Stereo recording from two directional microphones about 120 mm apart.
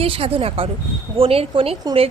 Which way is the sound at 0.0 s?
50° right (ahead or behind).